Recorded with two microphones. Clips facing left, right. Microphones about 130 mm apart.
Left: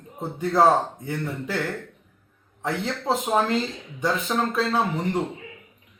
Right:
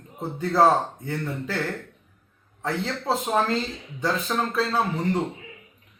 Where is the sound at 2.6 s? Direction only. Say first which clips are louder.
Left 1 dB; 15° left (ahead or behind).